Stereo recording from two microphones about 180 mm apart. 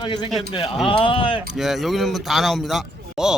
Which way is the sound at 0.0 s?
25° left (ahead or behind).